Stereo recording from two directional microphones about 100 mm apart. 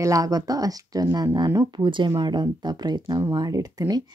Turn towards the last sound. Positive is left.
turn(degrees=-40)  # may be behind; listen again after turning